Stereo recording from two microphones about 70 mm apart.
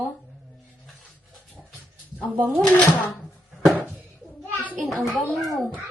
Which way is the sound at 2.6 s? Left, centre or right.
Centre.